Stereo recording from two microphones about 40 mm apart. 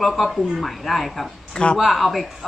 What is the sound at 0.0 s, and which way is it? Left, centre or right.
Speech, centre.